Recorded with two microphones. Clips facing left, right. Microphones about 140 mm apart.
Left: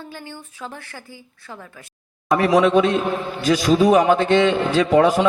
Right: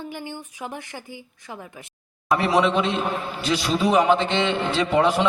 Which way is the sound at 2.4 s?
45° left (ahead or behind).